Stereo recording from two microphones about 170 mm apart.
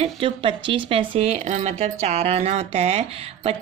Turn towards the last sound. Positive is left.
turn(degrees=-35)  # may be behind; listen again after turning